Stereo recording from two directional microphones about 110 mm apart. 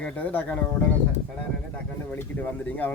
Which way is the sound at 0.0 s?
15° left (ahead or behind).